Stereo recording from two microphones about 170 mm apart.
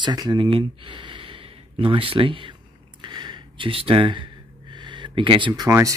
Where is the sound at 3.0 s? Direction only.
25° right (ahead or behind).